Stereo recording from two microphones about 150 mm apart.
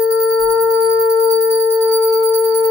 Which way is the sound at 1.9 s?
5° right (ahead or behind).